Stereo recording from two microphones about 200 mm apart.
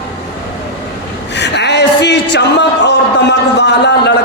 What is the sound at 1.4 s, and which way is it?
A man's voice, 60° left (ahead or behind).